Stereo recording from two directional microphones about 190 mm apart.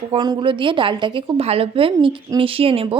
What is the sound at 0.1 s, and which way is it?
Speech, 25° right (ahead or behind).